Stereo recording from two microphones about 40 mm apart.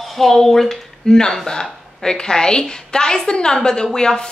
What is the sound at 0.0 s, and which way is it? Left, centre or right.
A woman's voice, centre.